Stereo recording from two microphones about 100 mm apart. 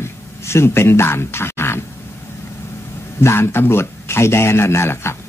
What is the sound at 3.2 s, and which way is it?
A man's voice, 25° left (ahead or behind).